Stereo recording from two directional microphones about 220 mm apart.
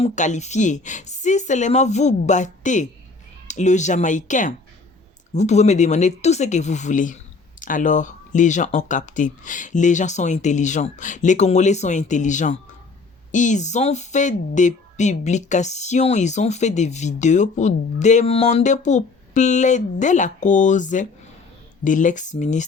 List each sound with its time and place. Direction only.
0.0 s speech: 30° left (ahead or behind)